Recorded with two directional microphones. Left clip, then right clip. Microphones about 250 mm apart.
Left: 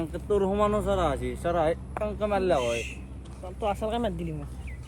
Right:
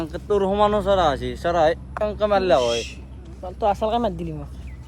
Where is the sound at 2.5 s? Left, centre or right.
Right.